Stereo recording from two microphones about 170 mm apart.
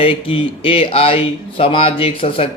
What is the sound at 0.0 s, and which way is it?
Speech, 30° left (ahead or behind).